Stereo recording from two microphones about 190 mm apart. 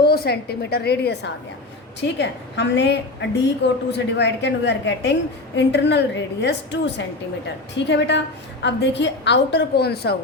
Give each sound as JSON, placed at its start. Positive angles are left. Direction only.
{"t": 0.0, "sound": "a woman's voice", "side_deg": 55}